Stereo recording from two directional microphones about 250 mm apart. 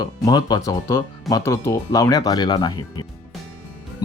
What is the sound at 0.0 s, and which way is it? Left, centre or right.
Speech, centre.